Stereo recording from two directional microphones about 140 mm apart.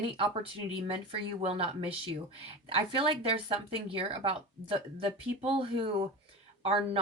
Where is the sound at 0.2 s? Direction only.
40° right (ahead or behind).